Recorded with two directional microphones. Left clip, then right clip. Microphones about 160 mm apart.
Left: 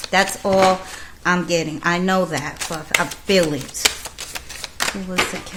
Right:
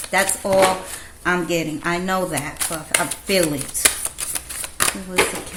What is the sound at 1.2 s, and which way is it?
Speech, 30° left (ahead or behind).